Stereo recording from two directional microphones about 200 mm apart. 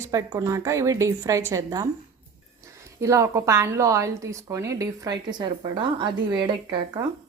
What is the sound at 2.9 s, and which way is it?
Speech, 15° right (ahead or behind).